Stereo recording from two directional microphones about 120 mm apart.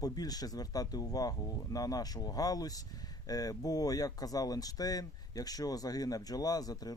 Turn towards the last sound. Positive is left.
turn(degrees=30)  # may be behind; listen again after turning